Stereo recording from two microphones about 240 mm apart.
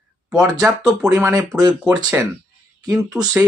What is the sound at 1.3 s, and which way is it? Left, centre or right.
Speech, centre.